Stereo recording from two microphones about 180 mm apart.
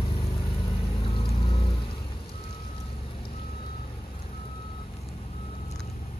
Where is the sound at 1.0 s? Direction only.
30° left (ahead or behind).